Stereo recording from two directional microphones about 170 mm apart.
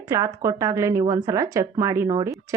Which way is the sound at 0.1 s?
20° right (ahead or behind).